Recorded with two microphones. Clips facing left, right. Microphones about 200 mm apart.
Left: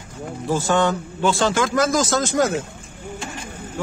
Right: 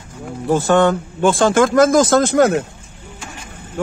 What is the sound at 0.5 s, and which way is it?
A man's voice, 60° right (ahead or behind).